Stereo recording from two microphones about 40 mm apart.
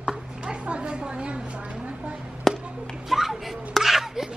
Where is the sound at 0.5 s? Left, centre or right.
Right.